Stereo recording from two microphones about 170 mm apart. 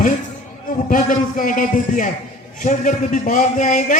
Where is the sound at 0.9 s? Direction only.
55° left (ahead or behind).